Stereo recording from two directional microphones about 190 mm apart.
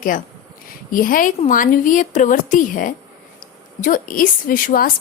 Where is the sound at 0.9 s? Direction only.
45° left (ahead or behind).